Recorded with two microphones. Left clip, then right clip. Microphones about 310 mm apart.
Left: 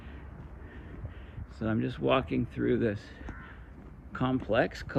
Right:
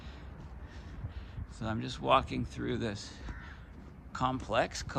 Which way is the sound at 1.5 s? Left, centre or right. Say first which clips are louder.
Left 6 dB; centre.